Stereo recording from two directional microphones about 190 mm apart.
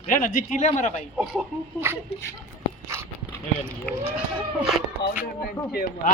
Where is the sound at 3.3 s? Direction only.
5° left (ahead or behind).